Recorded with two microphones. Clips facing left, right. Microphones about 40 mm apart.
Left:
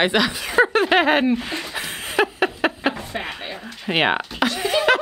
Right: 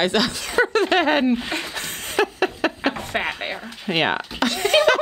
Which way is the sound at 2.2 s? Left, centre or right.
Centre.